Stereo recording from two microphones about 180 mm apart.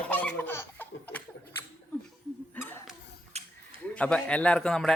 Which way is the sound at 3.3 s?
35° right (ahead or behind).